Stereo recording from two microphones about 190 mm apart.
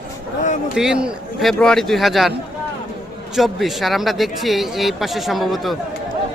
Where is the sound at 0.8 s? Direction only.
5° right (ahead or behind).